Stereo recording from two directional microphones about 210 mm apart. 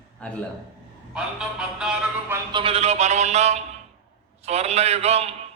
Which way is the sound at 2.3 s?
20° right (ahead or behind).